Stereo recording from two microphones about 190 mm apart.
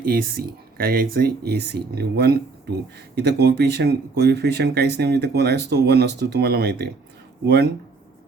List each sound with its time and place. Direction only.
0.0 s speech: 50° right (ahead or behind)